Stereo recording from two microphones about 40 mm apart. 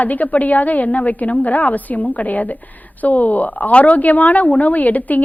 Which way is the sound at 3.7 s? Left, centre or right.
Left.